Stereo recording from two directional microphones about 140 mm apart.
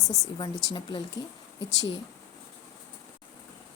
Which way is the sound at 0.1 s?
30° left (ahead or behind).